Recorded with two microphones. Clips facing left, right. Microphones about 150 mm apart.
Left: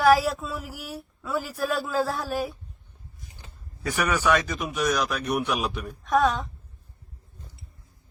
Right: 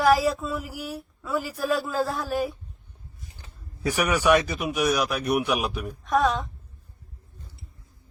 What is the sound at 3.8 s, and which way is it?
A man's voice, 10° right (ahead or behind).